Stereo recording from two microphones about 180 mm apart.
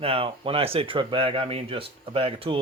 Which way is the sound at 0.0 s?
30° right (ahead or behind).